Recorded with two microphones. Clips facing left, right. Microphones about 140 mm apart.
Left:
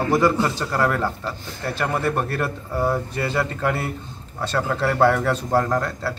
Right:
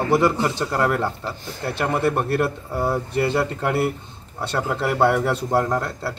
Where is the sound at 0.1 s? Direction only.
15° right (ahead or behind).